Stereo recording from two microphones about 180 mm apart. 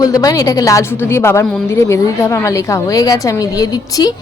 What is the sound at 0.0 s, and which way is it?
A woman's voice, 20° left (ahead or behind).